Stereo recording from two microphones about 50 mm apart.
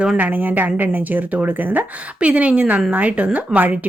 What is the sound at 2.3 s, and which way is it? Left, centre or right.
Speech, right.